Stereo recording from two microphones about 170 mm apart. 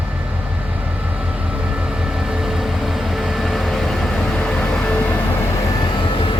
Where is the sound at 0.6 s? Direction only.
10° right (ahead or behind).